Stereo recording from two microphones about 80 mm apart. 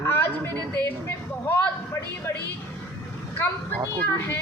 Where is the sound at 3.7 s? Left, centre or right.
Right.